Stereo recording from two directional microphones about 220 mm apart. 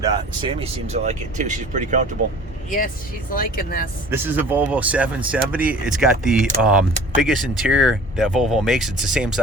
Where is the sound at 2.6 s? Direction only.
40° left (ahead or behind).